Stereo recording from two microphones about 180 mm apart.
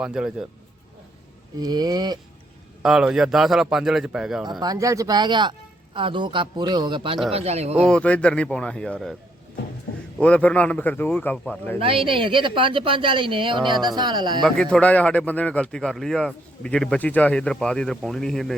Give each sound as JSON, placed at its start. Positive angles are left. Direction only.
{"t": 0.0, "sound": "a man's voice", "side_deg": -5}
{"t": 1.5, "sound": "a woman's voice", "side_deg": -20}
{"t": 2.8, "sound": "a man's voice", "side_deg": -5}
{"t": 4.6, "sound": "a woman's voice", "side_deg": -20}
{"t": 7.9, "sound": "a man's voice", "side_deg": 5}
{"t": 10.2, "sound": "speech", "side_deg": 5}
{"t": 11.8, "sound": "a woman's voice", "side_deg": -30}
{"t": 14.4, "sound": "a man's voice", "side_deg": 5}